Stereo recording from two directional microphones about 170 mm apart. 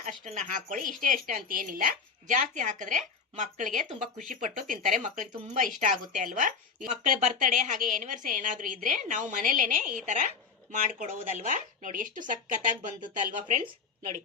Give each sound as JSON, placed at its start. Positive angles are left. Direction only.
{"t": 0.0, "sound": "a woman's voice", "side_deg": -45}